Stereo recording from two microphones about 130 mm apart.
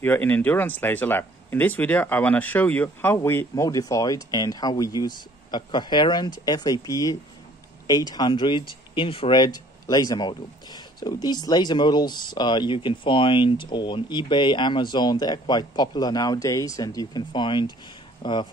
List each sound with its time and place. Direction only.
0.0 s speech: 15° left (ahead or behind); by 9.4 s 45° left (ahead or behind)
9.4 s speech: 30° left (ahead or behind)